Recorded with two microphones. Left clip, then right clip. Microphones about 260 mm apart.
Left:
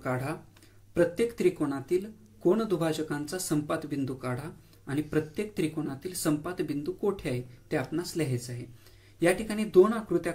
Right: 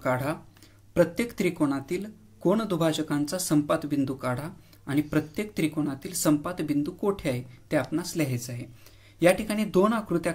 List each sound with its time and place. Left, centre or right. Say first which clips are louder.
0.0 s speech: right 5 dB; right